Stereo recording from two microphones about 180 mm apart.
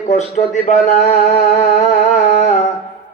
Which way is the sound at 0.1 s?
40° left (ahead or behind).